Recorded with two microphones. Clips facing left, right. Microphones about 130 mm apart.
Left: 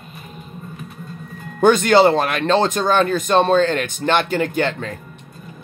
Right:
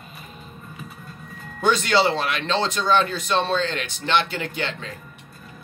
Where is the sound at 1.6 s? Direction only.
50° left (ahead or behind).